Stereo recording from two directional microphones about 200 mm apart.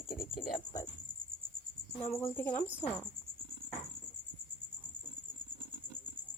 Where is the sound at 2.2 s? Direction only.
10° left (ahead or behind).